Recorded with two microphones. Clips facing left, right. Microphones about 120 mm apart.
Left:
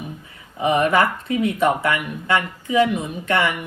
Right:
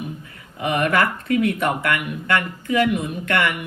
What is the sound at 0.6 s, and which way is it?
Speech, 25° left (ahead or behind).